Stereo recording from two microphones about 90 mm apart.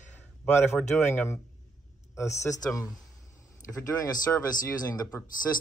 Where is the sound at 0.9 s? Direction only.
25° left (ahead or behind).